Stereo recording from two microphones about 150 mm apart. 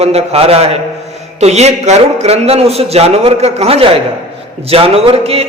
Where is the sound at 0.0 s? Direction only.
45° right (ahead or behind).